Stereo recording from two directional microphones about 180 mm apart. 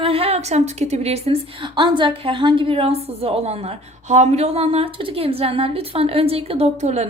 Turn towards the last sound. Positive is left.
turn(degrees=-40)  # may be behind; listen again after turning